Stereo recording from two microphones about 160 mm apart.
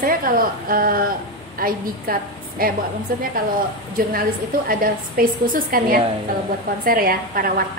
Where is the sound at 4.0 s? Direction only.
65° right (ahead or behind).